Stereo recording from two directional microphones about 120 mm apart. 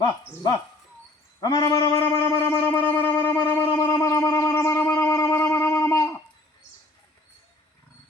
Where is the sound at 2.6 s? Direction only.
15° left (ahead or behind).